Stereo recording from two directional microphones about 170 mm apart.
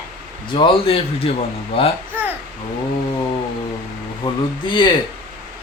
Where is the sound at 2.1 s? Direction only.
10° right (ahead or behind).